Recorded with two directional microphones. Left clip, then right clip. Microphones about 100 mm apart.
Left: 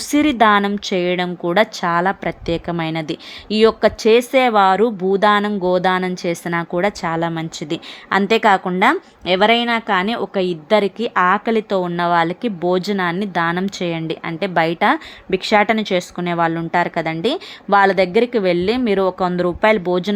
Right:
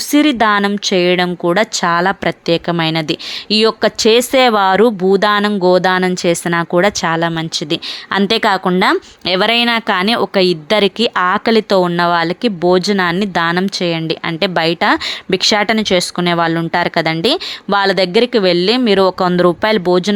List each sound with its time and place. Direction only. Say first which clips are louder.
0.1 s speech: right 1 dB; 15° right (ahead or behind); by 7.2 s 35° right (ahead or behind)
7.2 s speech: right 5 dB; 20° right (ahead or behind)
14.7 s a woman's voice: right 3 dB; 15° right (ahead or behind)
14.9 s speech: right 6 dB; 35° right (ahead or behind)
15.6 s speech: right 4 dB; 25° right (ahead or behind)